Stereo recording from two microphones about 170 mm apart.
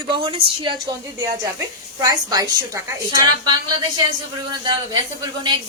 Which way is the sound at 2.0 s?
20° right (ahead or behind).